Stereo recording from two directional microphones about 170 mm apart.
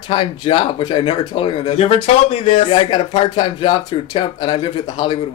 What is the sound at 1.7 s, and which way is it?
Speech, 40° left (ahead or behind).